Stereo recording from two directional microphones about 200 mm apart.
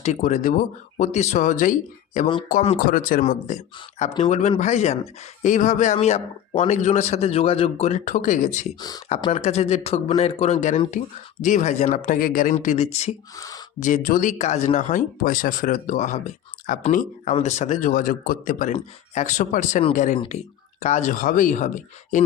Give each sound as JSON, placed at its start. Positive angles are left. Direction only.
{"t": 0.0, "sound": "speech", "side_deg": 40}
{"t": 13.3, "sound": "speech", "side_deg": 15}
{"t": 13.7, "sound": "speech", "side_deg": 40}